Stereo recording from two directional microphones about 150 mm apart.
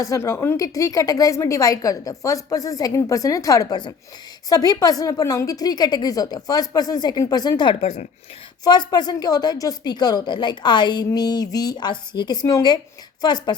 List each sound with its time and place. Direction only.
0.0 s a woman's voice: 20° left (ahead or behind)